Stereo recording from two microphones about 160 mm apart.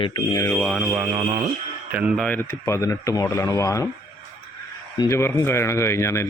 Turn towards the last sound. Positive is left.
turn(degrees=15)  # may be behind; listen again after turning